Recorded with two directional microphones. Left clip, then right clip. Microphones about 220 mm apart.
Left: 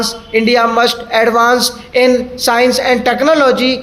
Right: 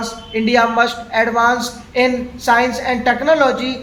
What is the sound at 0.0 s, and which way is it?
Speech, 50° left (ahead or behind).